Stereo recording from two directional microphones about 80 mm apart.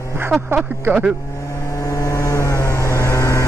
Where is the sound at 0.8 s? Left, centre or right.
Right.